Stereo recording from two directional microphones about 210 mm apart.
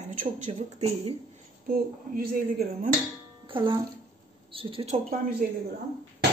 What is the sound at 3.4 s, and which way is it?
Music, 25° right (ahead or behind).